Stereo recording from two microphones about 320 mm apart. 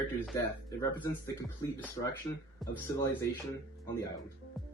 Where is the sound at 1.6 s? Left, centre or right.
Centre.